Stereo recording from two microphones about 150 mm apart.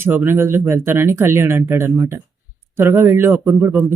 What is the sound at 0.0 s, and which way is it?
Speech, 15° right (ahead or behind).